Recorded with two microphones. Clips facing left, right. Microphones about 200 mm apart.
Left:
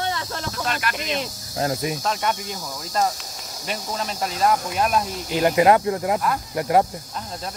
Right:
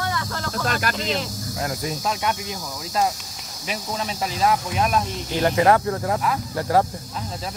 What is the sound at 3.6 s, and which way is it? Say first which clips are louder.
Speech: even; centre (ahead or behind).